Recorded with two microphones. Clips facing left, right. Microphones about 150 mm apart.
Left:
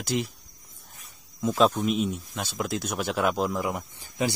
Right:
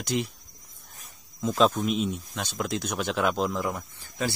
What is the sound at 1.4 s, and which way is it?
Speech, 5° left (ahead or behind).